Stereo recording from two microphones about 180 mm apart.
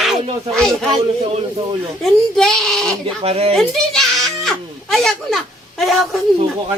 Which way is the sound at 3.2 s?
35° right (ahead or behind).